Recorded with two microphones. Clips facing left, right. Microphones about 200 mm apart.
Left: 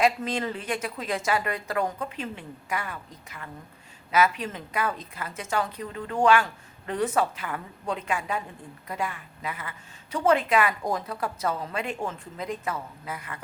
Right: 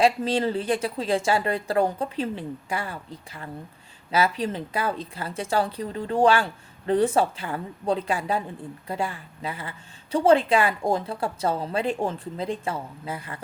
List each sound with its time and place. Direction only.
0.0 s a woman's voice: 30° right (ahead or behind)